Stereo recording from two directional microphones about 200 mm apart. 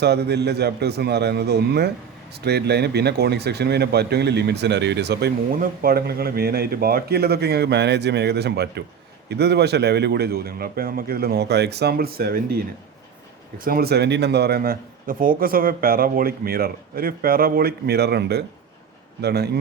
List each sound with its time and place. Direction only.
0.0 s a man's voice: 55° right (ahead or behind)
13.7 s a man's voice: 50° right (ahead or behind)